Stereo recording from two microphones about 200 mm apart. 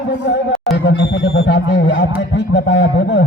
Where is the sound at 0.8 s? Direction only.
65° left (ahead or behind).